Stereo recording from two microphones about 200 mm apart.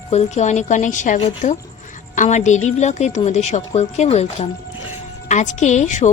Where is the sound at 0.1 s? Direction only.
35° left (ahead or behind).